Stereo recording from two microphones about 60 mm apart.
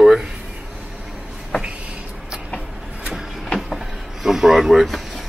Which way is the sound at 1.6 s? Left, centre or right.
Centre.